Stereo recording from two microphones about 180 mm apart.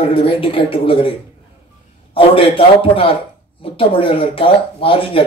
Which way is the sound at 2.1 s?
30° left (ahead or behind).